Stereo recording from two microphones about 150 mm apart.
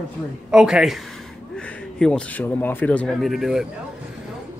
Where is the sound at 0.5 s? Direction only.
5° right (ahead or behind).